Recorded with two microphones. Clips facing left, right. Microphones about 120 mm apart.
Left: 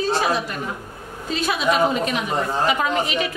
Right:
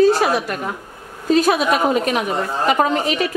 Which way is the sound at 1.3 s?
45° right (ahead or behind).